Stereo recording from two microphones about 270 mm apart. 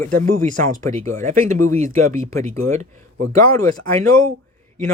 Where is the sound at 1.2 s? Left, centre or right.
Right.